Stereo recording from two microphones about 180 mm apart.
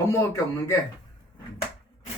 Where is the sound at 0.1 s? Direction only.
15° left (ahead or behind).